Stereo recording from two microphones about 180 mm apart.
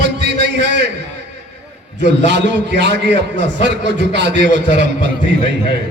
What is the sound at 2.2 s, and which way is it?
A man's voice, 75° right (ahead or behind).